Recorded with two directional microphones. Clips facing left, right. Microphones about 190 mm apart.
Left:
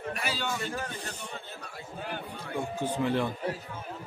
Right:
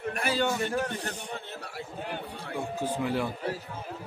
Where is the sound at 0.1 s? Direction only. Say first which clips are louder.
Right 6 dB; 55° right (ahead or behind).